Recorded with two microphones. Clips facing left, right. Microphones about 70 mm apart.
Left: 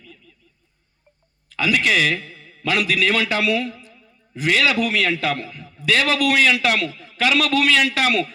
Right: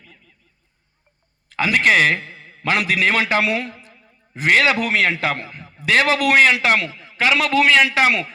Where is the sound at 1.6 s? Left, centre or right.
Right.